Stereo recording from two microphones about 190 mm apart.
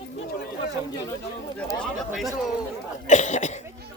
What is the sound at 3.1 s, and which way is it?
Cough, 40° left (ahead or behind).